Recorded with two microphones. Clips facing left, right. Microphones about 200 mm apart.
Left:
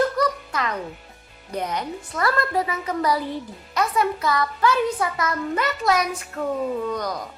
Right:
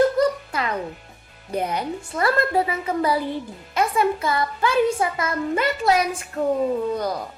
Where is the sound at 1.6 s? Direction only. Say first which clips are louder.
Right 2 dB; 25° right (ahead or behind).